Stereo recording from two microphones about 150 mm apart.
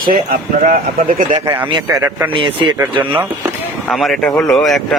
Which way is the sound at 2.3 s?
35° right (ahead or behind).